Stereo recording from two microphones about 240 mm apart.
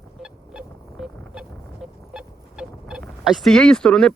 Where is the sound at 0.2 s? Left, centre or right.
Centre.